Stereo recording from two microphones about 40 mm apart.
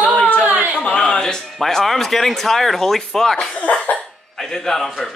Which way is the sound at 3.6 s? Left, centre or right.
Left.